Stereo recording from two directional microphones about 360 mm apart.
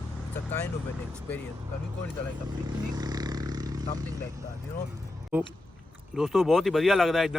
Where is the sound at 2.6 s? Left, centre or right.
Centre.